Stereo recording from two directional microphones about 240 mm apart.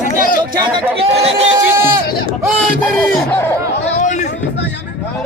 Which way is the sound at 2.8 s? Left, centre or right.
Centre.